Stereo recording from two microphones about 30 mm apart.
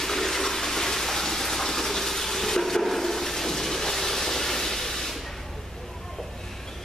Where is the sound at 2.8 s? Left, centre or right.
Centre.